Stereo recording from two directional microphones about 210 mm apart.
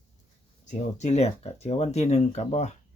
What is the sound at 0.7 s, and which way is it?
Speech, 35° left (ahead or behind).